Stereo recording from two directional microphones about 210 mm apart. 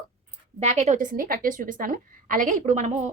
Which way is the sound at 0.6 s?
35° right (ahead or behind).